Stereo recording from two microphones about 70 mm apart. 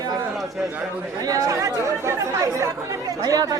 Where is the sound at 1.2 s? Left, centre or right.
Right.